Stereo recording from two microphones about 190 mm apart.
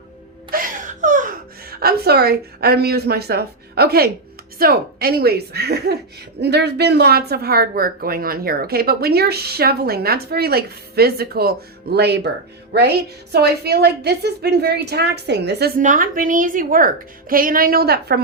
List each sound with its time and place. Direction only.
0.5 s a woman's voice: 45° right (ahead or behind)